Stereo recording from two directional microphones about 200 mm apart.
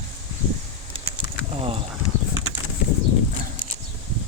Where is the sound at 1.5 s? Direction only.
25° right (ahead or behind).